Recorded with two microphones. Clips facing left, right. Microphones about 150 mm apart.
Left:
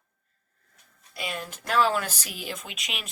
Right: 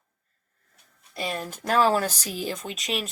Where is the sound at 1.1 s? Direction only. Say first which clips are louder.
Right 4 dB; 40° right (ahead or behind).